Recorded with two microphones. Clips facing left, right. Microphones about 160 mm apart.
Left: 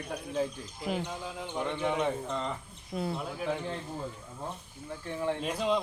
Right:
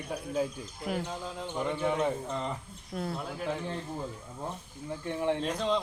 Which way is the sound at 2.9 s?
5° left (ahead or behind).